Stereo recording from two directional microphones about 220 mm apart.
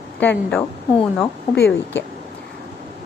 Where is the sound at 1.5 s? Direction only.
50° left (ahead or behind).